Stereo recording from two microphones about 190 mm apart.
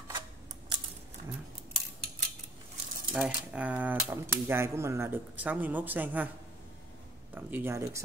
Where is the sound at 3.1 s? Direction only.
5° right (ahead or behind).